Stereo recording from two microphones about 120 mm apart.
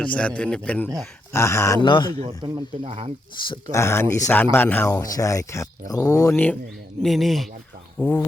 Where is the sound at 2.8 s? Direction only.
60° right (ahead or behind).